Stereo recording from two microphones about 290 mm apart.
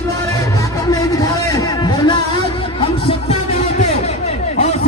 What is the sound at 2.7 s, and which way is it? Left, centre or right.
Music, centre.